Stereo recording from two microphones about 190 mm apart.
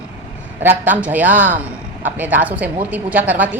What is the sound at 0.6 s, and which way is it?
A woman's voice, 10° right (ahead or behind).